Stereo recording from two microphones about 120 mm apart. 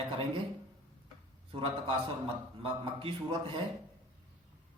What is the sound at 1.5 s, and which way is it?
Mantra, 50° right (ahead or behind).